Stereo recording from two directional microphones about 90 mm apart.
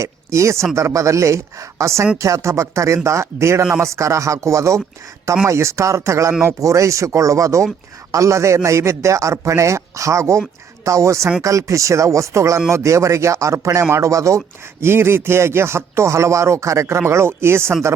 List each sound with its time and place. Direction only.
0.0 s speech: 35° right (ahead or behind)